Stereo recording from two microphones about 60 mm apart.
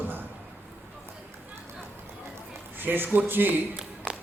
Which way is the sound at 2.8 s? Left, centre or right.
Right.